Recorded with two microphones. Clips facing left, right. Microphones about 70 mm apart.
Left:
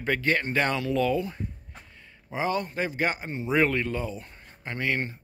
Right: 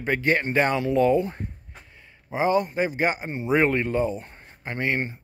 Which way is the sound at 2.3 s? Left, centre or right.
Right.